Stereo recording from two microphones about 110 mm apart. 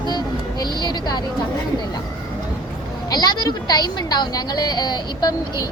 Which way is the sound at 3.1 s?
40° left (ahead or behind).